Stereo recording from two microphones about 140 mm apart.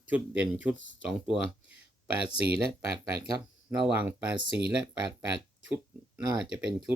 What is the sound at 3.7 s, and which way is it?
Speech, 10° right (ahead or behind).